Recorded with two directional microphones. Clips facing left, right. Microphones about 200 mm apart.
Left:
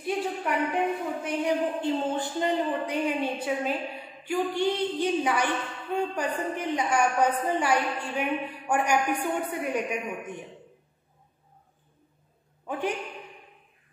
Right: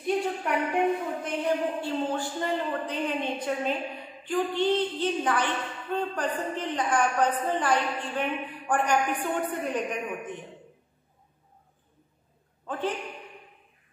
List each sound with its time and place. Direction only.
0.0 s a sound: centre (ahead or behind)
1.4 s a woman's voice: 20° left (ahead or behind)
12.6 s a man's voice: 10° left (ahead or behind)